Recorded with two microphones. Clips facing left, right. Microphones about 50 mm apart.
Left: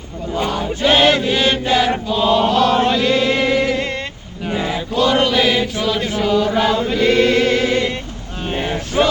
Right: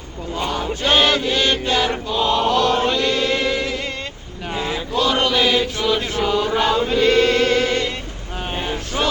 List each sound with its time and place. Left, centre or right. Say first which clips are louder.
0.3 s male singing: left 3 dB; centre
0.8 s chant: left 4 dB; centre
4.5 s chant: left 3 dB; centre
4.9 s chant: left 3 dB; centre
7.3 s chant: left 2 dB; left
8.5 s a sound: left 6 dB; centre